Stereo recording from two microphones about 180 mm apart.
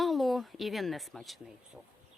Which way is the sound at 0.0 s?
Centre (ahead or behind).